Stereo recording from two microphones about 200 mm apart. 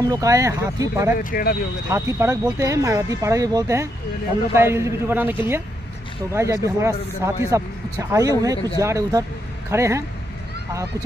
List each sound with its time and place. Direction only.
0.0 s a man's voice: 15° right (ahead or behind)
1.3 s speech: 50° left (ahead or behind)
1.9 s a man's voice: 15° right (ahead or behind)